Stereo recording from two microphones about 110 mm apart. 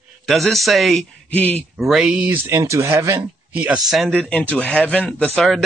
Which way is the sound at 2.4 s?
25° right (ahead or behind).